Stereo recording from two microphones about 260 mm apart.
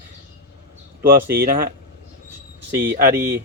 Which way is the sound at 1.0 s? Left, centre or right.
Right.